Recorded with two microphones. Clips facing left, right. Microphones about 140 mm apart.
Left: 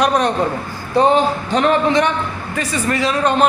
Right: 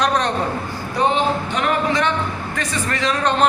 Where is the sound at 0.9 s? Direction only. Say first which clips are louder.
Left 5 dB; 35° left (ahead or behind).